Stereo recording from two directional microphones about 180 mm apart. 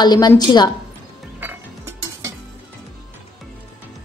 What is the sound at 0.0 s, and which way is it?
Speech, 25° left (ahead or behind).